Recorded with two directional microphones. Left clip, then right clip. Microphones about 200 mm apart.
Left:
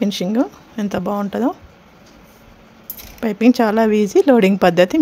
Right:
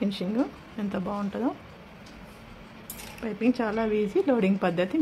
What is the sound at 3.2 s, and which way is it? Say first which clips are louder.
Speech: left 12 dB; 50° left (ahead or behind).